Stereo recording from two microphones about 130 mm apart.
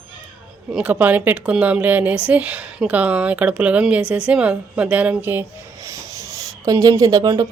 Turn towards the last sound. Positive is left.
turn(degrees=-25)  # may be behind; listen again after turning